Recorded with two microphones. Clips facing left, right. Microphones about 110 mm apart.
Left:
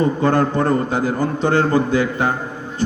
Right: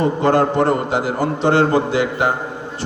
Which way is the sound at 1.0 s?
80° right.